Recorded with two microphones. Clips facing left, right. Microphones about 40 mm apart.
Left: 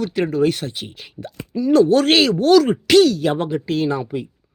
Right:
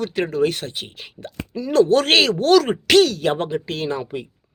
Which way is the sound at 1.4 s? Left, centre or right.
Right.